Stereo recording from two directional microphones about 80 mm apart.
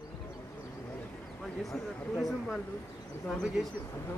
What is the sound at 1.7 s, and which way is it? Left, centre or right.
Speech, centre.